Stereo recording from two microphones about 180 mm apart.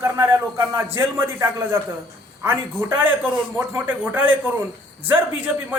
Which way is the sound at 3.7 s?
10° right (ahead or behind).